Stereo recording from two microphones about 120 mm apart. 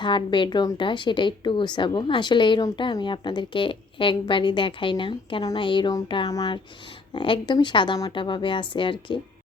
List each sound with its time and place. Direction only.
0.0 s a woman's voice: 40° left (ahead or behind)